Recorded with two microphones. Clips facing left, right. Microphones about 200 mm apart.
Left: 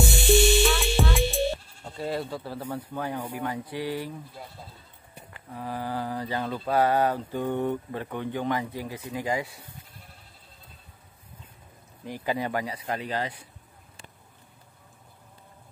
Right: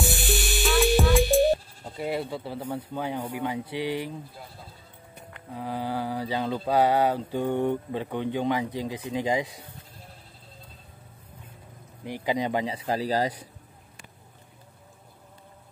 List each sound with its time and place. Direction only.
0.0 s music: centre (ahead or behind)
2.0 s speech: 15° right (ahead or behind)
2.6 s speech: 10° right (ahead or behind)
5.5 s speech: 15° right (ahead or behind)
12.0 s speech: 15° right (ahead or behind); by 13.3 s 35° right (ahead or behind)